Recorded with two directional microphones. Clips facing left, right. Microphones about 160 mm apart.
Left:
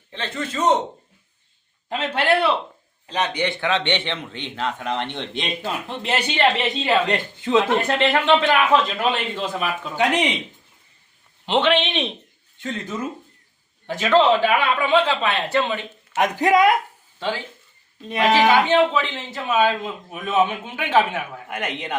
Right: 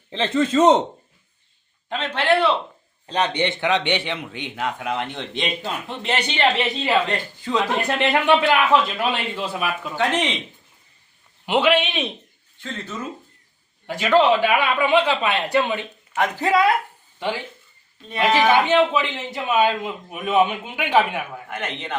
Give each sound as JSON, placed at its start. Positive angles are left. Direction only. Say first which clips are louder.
{"t": 0.1, "sound": "a man's voice", "louder": "right 9 dB", "side_deg": -90}
{"t": 1.9, "sound": "a man's voice", "louder": "even", "side_deg": 10}
{"t": 3.2, "sound": "speech", "louder": "right 1 dB", "side_deg": -25}
{"t": 7.1, "sound": "speech", "louder": "left 4 dB", "side_deg": 25}
{"t": 7.8, "sound": "speech", "louder": "left 1 dB", "side_deg": -15}
{"t": 9.9, "sound": "a man's voice", "louder": "left 2 dB", "side_deg": 15}
{"t": 11.4, "sound": "speech", "louder": "right 1 dB", "side_deg": -10}
{"t": 13.8, "sound": "speech", "louder": "even", "side_deg": -10}
{"t": 16.1, "sound": "a man's voice", "louder": "left 2 dB", "side_deg": 15}
{"t": 17.2, "sound": "speech", "louder": "even", "side_deg": -15}
{"t": 18.1, "sound": "a man's voice", "louder": "left 1 dB", "side_deg": 20}
{"t": 18.9, "sound": "speech", "louder": "right 1 dB", "side_deg": -15}
{"t": 21.4, "sound": "a man's voice", "louder": "left 2 dB", "side_deg": 10}